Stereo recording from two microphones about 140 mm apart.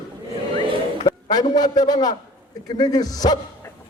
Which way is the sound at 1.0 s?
30° left (ahead or behind).